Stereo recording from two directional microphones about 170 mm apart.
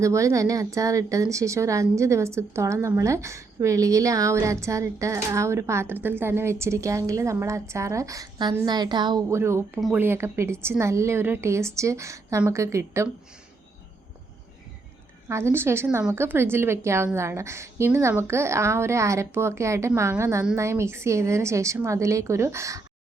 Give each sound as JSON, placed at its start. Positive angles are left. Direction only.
{"t": 0.0, "sound": "a woman's voice", "side_deg": -20}
{"t": 15.3, "sound": "a woman's voice", "side_deg": -15}